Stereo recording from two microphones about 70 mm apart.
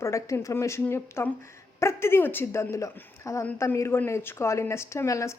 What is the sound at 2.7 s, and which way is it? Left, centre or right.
Speech, left.